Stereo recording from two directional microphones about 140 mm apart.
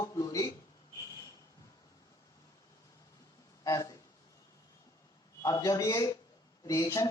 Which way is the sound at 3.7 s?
25° left (ahead or behind).